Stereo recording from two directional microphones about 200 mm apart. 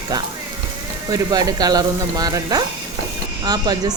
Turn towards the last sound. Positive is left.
turn(degrees=-20)  # may be behind; listen again after turning